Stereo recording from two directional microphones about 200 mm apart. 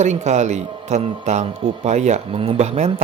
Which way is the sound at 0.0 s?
35° right (ahead or behind).